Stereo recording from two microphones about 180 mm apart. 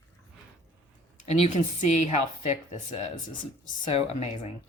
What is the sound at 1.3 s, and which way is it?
Speech, 40° left (ahead or behind).